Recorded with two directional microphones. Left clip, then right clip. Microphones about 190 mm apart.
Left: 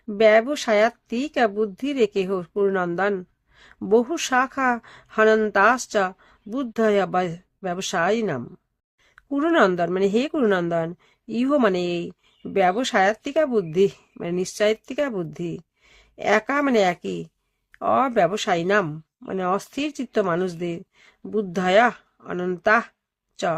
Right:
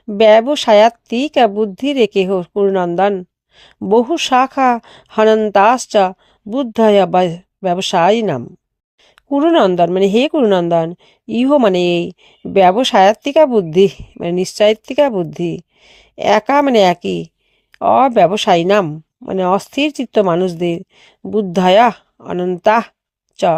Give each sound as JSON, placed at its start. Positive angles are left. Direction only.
{"t": 0.2, "sound": "speech", "side_deg": -30}
{"t": 3.5, "sound": "a sound", "side_deg": -30}
{"t": 3.8, "sound": "speech", "side_deg": -25}